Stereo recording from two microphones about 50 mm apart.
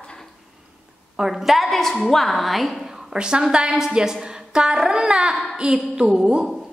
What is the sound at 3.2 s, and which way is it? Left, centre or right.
A woman's voice, centre.